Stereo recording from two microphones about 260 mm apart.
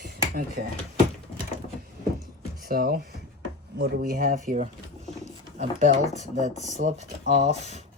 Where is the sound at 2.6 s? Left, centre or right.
Right.